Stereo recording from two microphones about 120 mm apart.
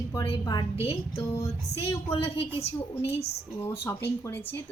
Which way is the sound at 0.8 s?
55° left (ahead or behind).